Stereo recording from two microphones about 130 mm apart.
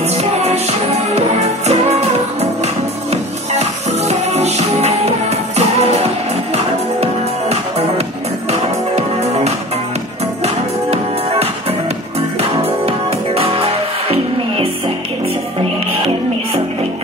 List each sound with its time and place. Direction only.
0.1 s music: 55° right (ahead or behind)